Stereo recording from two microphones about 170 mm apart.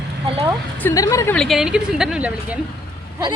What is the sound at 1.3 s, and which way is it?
A woman's voice, centre (ahead or behind).